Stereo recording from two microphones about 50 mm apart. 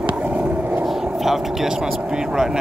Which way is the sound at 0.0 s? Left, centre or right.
Right.